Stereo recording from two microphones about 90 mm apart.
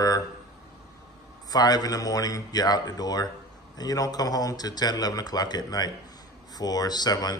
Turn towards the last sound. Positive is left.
turn(degrees=50)  # may be behind; listen again after turning